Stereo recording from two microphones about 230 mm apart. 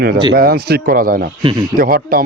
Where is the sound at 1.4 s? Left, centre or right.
Centre.